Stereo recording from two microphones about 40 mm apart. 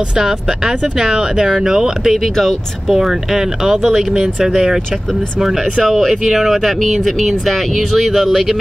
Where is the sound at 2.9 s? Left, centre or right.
Centre.